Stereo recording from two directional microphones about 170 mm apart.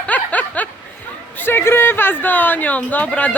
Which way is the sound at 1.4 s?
15° left (ahead or behind).